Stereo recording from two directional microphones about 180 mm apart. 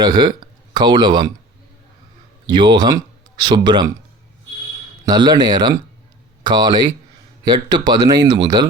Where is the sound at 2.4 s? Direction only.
25° right (ahead or behind).